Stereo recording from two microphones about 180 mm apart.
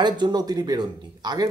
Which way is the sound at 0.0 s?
25° right (ahead or behind).